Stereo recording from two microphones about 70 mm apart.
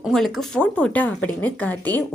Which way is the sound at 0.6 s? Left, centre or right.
Centre.